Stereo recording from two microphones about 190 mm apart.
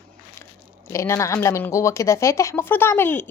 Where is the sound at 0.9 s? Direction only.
15° left (ahead or behind).